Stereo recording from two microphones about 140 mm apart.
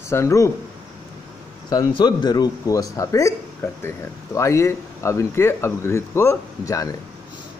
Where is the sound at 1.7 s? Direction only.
30° left (ahead or behind).